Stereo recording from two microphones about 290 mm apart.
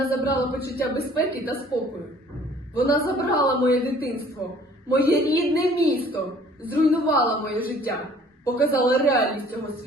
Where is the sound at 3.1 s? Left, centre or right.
Left.